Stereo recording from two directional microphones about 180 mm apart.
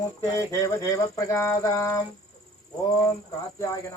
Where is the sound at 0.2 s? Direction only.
15° left (ahead or behind).